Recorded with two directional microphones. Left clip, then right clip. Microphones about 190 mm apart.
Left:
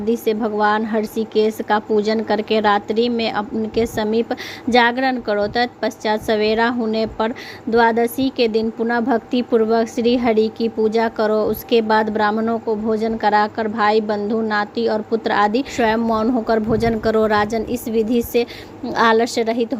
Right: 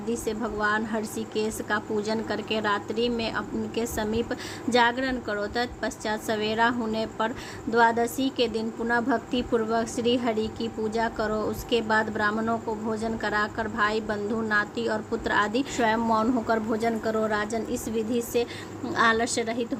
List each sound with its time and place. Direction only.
0.1 s speech: 35° left (ahead or behind)